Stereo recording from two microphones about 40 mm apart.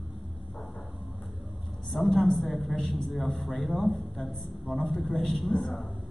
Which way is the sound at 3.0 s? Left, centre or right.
Centre.